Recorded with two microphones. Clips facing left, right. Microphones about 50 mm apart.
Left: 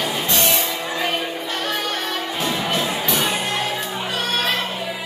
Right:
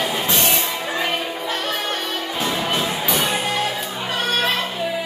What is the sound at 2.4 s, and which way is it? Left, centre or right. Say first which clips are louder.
Music: right 1 dB; centre.